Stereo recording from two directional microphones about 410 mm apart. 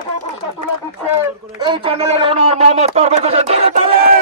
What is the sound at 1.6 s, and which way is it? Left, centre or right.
A man's voice, centre.